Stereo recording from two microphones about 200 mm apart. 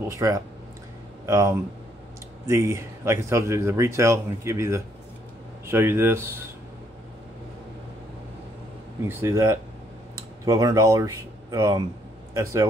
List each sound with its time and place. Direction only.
0.1 s a man's voice: 15° right (ahead or behind)
9.0 s a man's voice: 15° right (ahead or behind)